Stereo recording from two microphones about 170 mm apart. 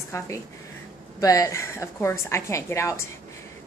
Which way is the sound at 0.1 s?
15° left (ahead or behind).